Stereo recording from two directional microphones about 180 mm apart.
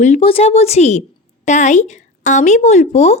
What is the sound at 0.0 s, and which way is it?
Speech, 35° left (ahead or behind).